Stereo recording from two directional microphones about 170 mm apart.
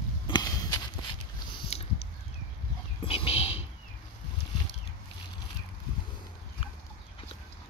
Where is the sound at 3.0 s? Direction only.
35° left (ahead or behind).